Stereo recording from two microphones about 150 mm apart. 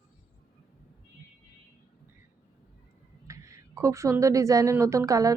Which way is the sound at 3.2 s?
20° right (ahead or behind).